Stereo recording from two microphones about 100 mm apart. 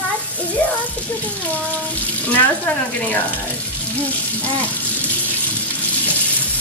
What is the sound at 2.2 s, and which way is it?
Speech, 15° left (ahead or behind).